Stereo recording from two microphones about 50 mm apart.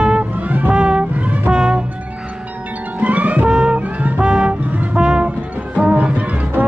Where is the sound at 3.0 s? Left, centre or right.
Right.